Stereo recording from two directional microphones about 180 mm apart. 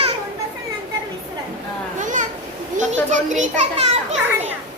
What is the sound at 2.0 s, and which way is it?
Children playing, 45° right (ahead or behind).